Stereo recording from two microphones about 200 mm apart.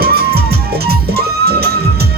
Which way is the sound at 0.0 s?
50° right (ahead or behind).